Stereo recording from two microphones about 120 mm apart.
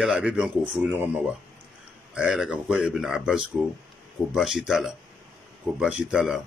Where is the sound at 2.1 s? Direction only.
5° right (ahead or behind).